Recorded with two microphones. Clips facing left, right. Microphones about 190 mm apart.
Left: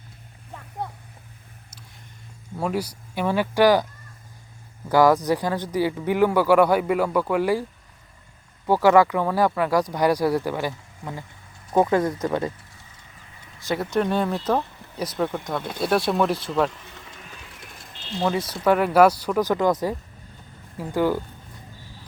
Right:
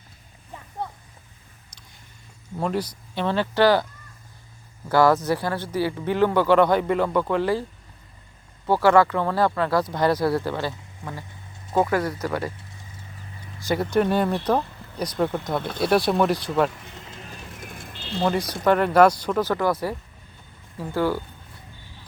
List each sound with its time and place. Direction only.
2.6 s speech: 10° left (ahead or behind)
4.9 s speech: 15° left (ahead or behind)
8.6 s speech: 15° left (ahead or behind)
13.7 s speech: centre (ahead or behind)
17.3 s a sound: 45° right (ahead or behind)
18.3 s speech: 5° left (ahead or behind)